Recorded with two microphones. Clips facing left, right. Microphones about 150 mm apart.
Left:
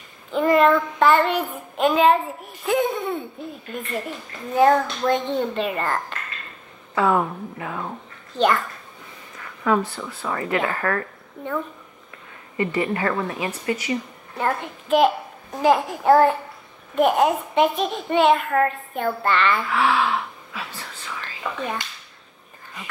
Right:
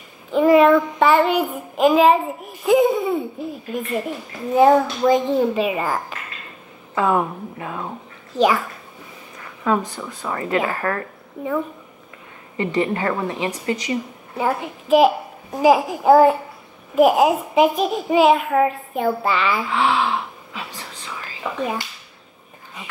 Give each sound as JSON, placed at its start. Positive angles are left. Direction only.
{"t": 0.3, "sound": "child singing", "side_deg": -5}
{"t": 7.0, "sound": "speech", "side_deg": -15}
{"t": 8.4, "sound": "child singing", "side_deg": -5}
{"t": 9.7, "sound": "a woman's voice", "side_deg": -15}
{"t": 11.4, "sound": "child singing", "side_deg": -5}
{"t": 12.5, "sound": "a woman's voice", "side_deg": -25}
{"t": 14.3, "sound": "a child's voice", "side_deg": -5}
{"t": 16.9, "sound": "child singing", "side_deg": -5}
{"t": 19.7, "sound": "speech", "side_deg": -25}
{"t": 21.2, "sound": "whispering", "side_deg": -10}